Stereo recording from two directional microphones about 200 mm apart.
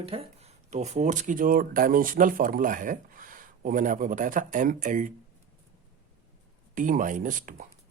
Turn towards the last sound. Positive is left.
turn(degrees=-40)  # may be behind; listen again after turning